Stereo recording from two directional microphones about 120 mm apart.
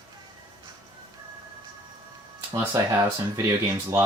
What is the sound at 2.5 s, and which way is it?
Speech, 30° right (ahead or behind).